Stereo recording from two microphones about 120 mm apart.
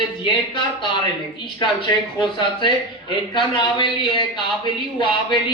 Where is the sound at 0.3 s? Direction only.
40° left (ahead or behind).